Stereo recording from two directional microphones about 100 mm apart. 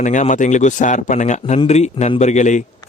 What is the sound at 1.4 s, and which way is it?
Speech, 90° left.